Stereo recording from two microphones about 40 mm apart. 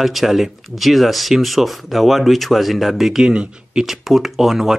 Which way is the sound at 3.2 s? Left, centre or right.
Centre.